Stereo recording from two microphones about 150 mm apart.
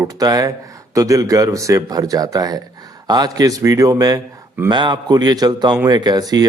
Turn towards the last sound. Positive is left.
turn(degrees=-25)  # may be behind; listen again after turning